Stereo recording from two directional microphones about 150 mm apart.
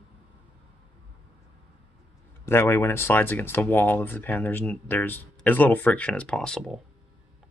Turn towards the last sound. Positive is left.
turn(degrees=5)  # may be behind; listen again after turning